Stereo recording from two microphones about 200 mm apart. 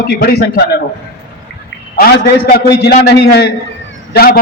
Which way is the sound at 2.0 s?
50° left (ahead or behind).